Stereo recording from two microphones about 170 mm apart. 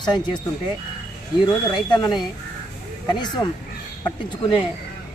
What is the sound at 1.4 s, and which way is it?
A man's voice, 25° left (ahead or behind).